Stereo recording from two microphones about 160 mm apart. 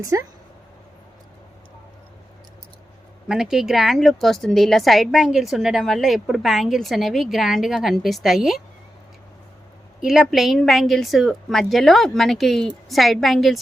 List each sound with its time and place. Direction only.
0.0 s speech: 20° right (ahead or behind)
3.2 s a woman's voice: 5° right (ahead or behind)
10.0 s a woman's voice: 5° right (ahead or behind)